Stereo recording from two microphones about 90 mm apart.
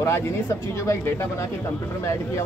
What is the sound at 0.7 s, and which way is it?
Speech, 30° left (ahead or behind).